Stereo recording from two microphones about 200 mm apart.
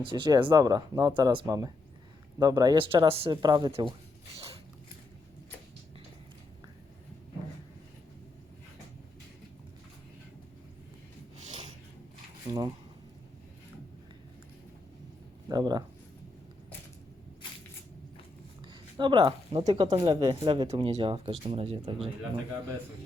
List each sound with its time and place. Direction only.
0.0 s speech: 25° right (ahead or behind)
4.4 s a sound: 30° right (ahead or behind)
12.5 s speech: 20° right (ahead or behind)
15.4 s speech: 20° right (ahead or behind)
18.7 s speech: 25° right (ahead or behind)